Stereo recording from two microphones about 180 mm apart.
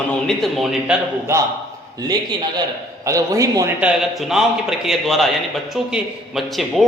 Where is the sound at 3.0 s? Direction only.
20° right (ahead or behind).